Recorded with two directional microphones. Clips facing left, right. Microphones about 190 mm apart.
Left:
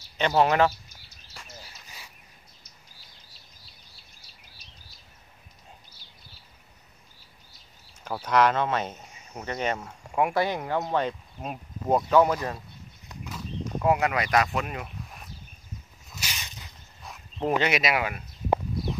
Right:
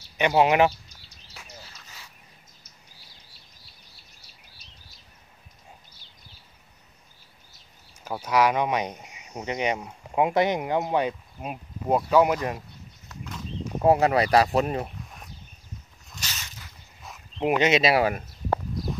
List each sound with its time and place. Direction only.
0.2 s speech: 15° right (ahead or behind)
8.0 s speech: 10° right (ahead or behind)
13.1 s a sound: 10° left (ahead or behind)
13.8 s speech: 30° right (ahead or behind)
16.1 s a sound: 10° left (ahead or behind)
17.4 s speech: 20° right (ahead or behind); by 18.2 s 35° right (ahead or behind)